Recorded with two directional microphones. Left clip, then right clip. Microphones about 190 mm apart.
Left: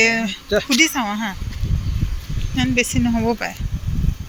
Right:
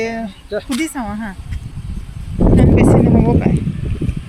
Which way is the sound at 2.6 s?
10° right (ahead or behind).